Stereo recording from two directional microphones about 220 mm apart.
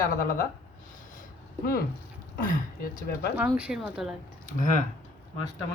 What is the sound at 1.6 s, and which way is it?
Speech, 40° left (ahead or behind).